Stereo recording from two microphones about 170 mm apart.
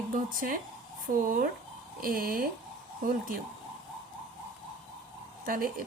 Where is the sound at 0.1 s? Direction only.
55° right (ahead or behind).